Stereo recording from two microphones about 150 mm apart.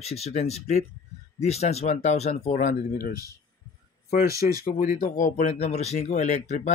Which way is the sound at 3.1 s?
25° right (ahead or behind).